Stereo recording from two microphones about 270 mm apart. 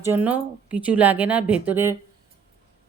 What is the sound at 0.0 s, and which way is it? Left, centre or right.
A woman's voice, centre.